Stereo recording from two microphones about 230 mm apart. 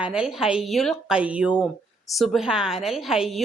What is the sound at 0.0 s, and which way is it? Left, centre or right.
A woman's voice, centre.